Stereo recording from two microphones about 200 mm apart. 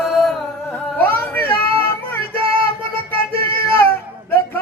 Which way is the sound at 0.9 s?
10° left (ahead or behind).